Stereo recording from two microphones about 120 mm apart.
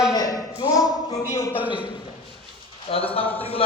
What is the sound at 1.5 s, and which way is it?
Speech, 15° right (ahead or behind).